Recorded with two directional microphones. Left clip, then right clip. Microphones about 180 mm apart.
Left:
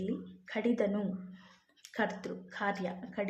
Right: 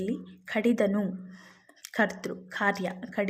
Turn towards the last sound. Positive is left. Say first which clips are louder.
# right 6 dB
turn(degrees=-25)  # may be behind; listen again after turning